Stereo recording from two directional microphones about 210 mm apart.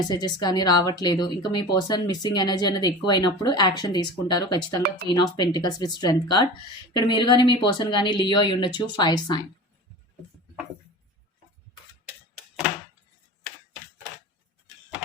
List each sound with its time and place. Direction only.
0.0 s speech: 20° left (ahead or behind)